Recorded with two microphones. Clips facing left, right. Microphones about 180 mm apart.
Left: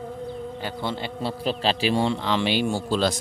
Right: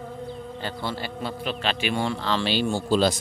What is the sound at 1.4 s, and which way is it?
Speech, 35° left (ahead or behind).